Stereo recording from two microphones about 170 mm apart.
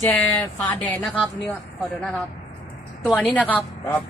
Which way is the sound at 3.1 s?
10° left (ahead or behind).